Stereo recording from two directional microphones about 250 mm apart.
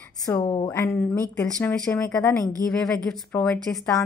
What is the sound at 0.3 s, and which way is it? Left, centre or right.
A woman's voice, centre.